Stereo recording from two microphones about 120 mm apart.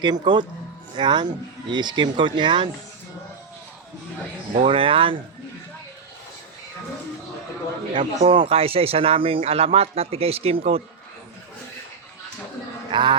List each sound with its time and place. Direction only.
0.0 s speech: 40° right (ahead or behind)
4.6 s speech: 50° right (ahead or behind)
7.9 s a man's voice: 45° right (ahead or behind)
12.9 s speech: 40° right (ahead or behind)